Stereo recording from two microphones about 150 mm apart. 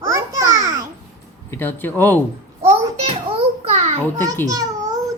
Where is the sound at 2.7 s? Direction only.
45° right (ahead or behind).